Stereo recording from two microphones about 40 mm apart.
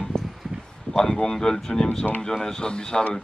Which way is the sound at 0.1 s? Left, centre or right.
Centre.